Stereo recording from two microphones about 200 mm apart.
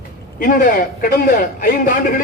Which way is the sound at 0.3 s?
45° left (ahead or behind).